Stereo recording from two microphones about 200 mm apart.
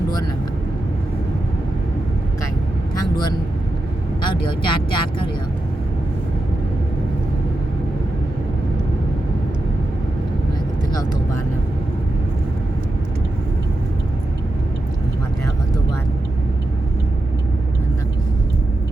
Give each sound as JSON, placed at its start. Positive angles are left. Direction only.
{"t": 2.9, "sound": "vehicle", "side_deg": 20}
{"t": 4.2, "sound": "speech", "side_deg": 25}